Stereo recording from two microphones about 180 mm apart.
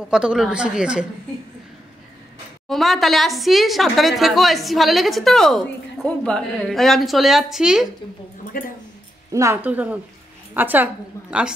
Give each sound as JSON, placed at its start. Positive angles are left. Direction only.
{"t": 0.1, "sound": "a woman's voice", "side_deg": -5}
{"t": 2.7, "sound": "a woman's voice", "side_deg": 0}
{"t": 8.5, "sound": "speech", "side_deg": 50}
{"t": 9.3, "sound": "a woman's voice", "side_deg": -15}